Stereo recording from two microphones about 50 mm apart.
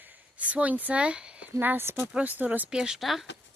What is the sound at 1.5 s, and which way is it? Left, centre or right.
Speech, right.